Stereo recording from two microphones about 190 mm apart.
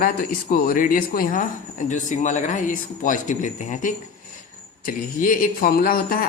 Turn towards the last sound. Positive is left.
turn(degrees=50)  # may be behind; listen again after turning